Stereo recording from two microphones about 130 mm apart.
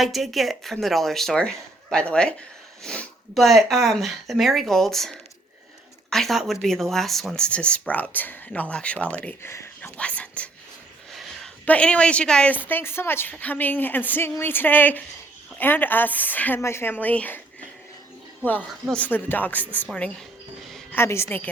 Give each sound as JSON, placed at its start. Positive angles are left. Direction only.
{"t": 0.0, "sound": "a woman's voice", "side_deg": 0}
{"t": 9.5, "sound": "whispering", "side_deg": 20}
{"t": 10.0, "sound": "speech", "side_deg": 10}
{"t": 11.1, "sound": "a sound", "side_deg": 0}
{"t": 11.6, "sound": "a woman's voice", "side_deg": 10}
{"t": 18.7, "sound": "a woman's voice", "side_deg": 5}
{"t": 20.9, "sound": "a woman's voice", "side_deg": 20}